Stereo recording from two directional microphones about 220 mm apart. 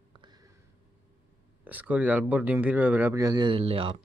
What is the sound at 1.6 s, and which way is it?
Speech, 5° right (ahead or behind).